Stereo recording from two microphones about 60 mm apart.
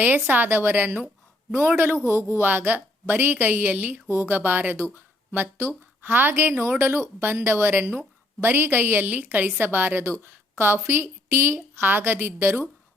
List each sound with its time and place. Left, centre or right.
0.3 s a woman's voice: right
4.1 s speech: right